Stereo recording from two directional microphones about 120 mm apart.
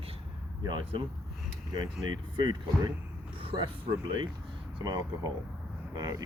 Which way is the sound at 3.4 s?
45° right (ahead or behind).